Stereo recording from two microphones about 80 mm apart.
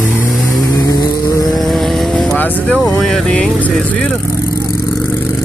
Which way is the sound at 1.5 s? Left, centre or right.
Centre.